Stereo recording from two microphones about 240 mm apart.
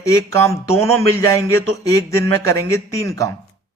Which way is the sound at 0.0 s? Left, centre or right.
Centre.